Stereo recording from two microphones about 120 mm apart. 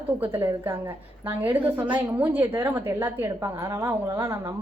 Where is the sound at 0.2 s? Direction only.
20° right (ahead or behind).